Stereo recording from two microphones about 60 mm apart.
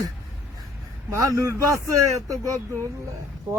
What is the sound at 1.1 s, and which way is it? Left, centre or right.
Speech, right.